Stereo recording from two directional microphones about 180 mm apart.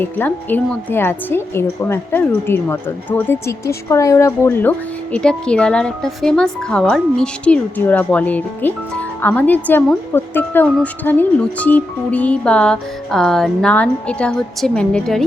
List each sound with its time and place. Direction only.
0.0 s a woman's voice: 10° left (ahead or behind)